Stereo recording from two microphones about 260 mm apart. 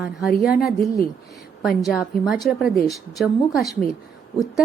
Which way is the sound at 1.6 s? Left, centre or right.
Centre.